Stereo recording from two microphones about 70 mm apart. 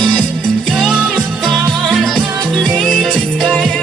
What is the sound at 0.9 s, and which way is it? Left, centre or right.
Music, centre.